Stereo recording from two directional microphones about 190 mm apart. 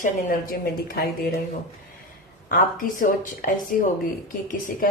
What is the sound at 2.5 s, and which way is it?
Speech, 45° left (ahead or behind).